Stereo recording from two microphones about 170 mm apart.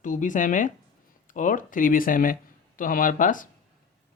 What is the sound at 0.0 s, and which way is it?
Speech, 50° left (ahead or behind).